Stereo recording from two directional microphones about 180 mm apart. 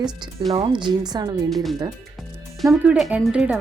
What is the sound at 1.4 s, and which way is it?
Speech, centre (ahead or behind).